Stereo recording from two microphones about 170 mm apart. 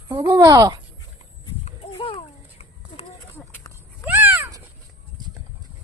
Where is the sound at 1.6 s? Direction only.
35° left (ahead or behind).